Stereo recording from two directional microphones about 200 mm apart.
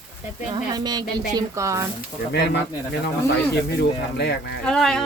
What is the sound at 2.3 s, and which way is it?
Speech, 60° left (ahead or behind).